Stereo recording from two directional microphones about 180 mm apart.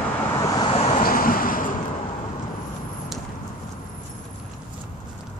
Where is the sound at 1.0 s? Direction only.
50° left (ahead or behind).